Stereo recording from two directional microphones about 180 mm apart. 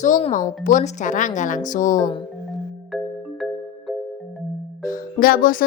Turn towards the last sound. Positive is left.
turn(degrees=50)  # may be behind; listen again after turning